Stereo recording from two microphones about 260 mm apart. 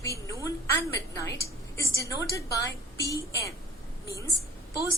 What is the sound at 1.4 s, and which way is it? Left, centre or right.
A woman's voice, centre.